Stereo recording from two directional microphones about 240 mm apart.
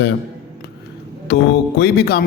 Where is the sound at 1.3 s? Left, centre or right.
Left.